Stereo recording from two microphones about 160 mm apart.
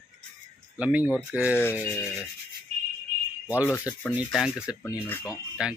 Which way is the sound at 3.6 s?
15° left (ahead or behind).